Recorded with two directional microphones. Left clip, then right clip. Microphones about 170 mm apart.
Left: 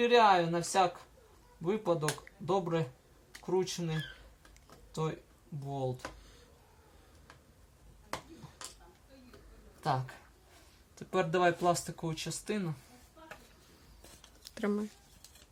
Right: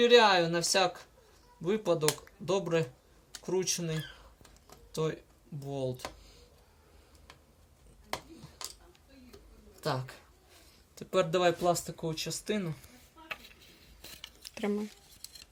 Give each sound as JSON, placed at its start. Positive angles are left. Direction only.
{"t": 0.0, "sound": "speech", "side_deg": 10}
{"t": 9.8, "sound": "speech", "side_deg": 15}
{"t": 14.5, "sound": "speech", "side_deg": 5}